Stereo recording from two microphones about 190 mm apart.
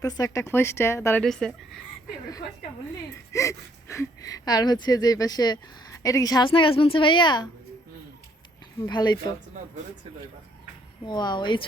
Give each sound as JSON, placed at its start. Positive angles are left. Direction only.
{"t": 0.0, "sound": "speech", "side_deg": 20}
{"t": 1.2, "sound": "speech", "side_deg": 0}
{"t": 3.3, "sound": "speech", "side_deg": 15}
{"t": 8.9, "sound": "speech", "side_deg": 25}
{"t": 11.0, "sound": "speech", "side_deg": 20}